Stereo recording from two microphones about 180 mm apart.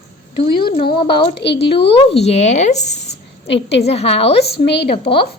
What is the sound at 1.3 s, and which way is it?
Speech, 70° left (ahead or behind).